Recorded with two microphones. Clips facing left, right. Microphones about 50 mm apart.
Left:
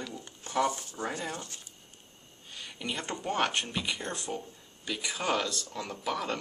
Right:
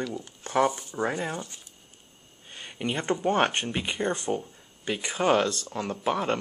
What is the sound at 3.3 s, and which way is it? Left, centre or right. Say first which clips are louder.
Speech: right 4 dB; right.